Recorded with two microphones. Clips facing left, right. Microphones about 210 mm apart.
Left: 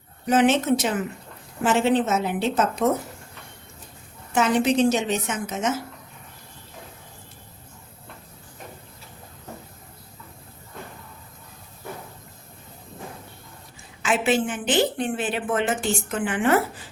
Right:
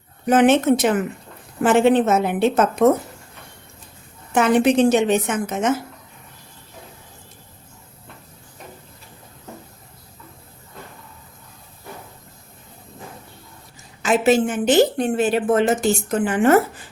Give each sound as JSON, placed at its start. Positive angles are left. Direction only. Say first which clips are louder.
{"t": 0.3, "sound": "a woman's voice", "louder": "right 4 dB", "side_deg": -55}
{"t": 4.3, "sound": "a woman's voice", "louder": "right 4 dB", "side_deg": -55}
{"t": 14.0, "sound": "a woman's voice", "louder": "right 5 dB", "side_deg": -40}